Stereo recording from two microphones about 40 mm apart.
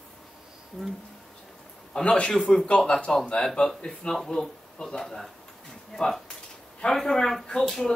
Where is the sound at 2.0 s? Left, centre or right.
Left.